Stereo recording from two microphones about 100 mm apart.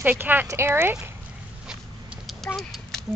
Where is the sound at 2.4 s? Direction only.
5° left (ahead or behind).